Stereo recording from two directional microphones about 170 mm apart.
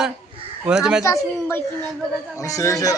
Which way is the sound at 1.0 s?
15° left (ahead or behind).